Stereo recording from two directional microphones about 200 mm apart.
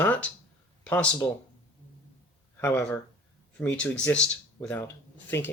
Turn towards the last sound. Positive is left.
turn(degrees=10)  # may be behind; listen again after turning